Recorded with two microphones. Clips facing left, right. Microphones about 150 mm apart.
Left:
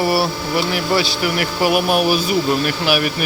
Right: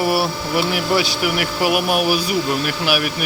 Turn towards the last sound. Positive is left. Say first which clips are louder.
# left 2 dB
turn(degrees=-5)  # may be behind; listen again after turning